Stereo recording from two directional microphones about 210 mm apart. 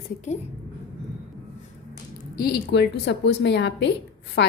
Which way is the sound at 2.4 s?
50° left (ahead or behind).